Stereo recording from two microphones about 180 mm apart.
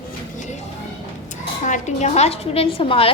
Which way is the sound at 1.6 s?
40° left (ahead or behind).